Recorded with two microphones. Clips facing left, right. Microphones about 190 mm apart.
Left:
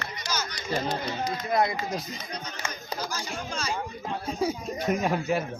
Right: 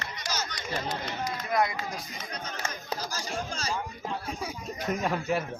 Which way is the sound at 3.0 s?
40° right (ahead or behind).